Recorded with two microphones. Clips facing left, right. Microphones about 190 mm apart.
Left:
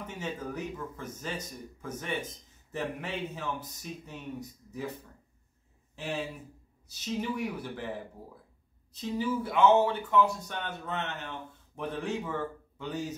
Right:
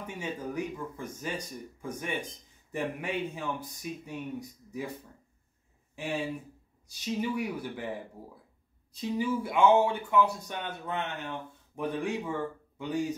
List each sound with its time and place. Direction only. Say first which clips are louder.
0.0 s speech: right 1 dB; 10° right (ahead or behind)
6.9 s speech: right 2 dB; 10° right (ahead or behind)
8.9 s speech: right 1 dB; 10° right (ahead or behind)